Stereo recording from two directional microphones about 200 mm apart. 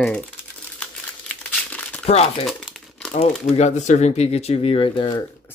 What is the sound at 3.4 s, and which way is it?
Speech, 35° left (ahead or behind).